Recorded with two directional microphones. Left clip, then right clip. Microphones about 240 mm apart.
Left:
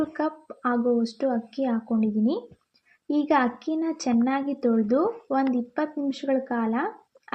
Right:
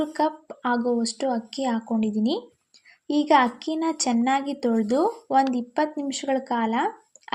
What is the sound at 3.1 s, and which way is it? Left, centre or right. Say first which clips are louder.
Speech: right 4 dB; right.